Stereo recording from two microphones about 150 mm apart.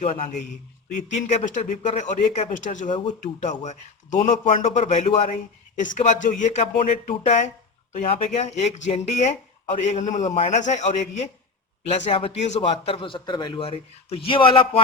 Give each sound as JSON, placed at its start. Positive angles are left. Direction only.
{"t": 0.0, "sound": "speech", "side_deg": 55}
{"t": 2.9, "sound": "a man's voice", "side_deg": 30}
{"t": 3.4, "sound": "a man's voice", "side_deg": 50}